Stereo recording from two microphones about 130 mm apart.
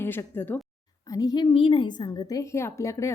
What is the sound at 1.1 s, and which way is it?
A woman's voice, 30° left (ahead or behind).